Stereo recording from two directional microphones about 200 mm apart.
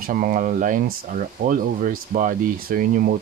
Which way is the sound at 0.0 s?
45° right (ahead or behind).